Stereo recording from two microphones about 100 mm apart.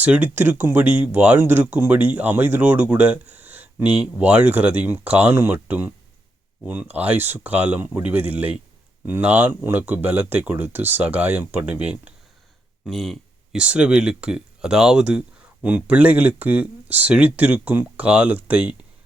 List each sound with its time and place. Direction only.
0.0 s speech: 15° right (ahead or behind)
12.8 s a sound: centre (ahead or behind)
13.6 s speech: 10° right (ahead or behind)